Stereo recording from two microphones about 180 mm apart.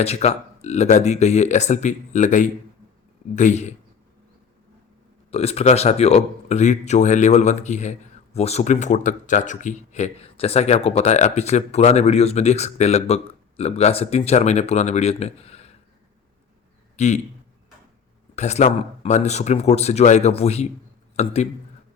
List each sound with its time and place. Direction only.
0.0 s speech: 35° left (ahead or behind)
5.3 s speech: 35° left (ahead or behind)
17.0 s speech: 40° left (ahead or behind)
18.3 s speech: 40° left (ahead or behind)